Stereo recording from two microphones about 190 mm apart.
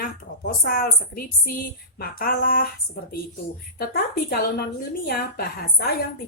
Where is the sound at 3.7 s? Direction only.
55° left (ahead or behind).